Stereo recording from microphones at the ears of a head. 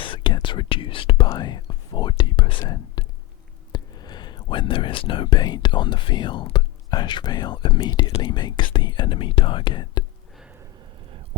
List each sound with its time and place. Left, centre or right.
0.0 s whispering: left
3.7 s speech: left